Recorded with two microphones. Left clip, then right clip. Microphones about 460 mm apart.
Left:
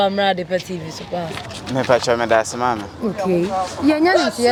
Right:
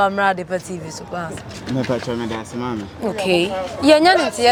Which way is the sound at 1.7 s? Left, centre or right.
Left.